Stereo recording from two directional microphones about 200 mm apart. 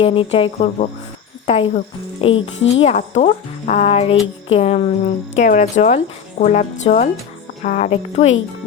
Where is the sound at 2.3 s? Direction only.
70° left (ahead or behind).